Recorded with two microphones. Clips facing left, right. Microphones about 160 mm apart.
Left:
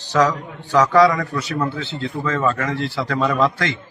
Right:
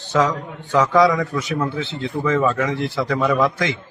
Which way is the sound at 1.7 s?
20° right (ahead or behind).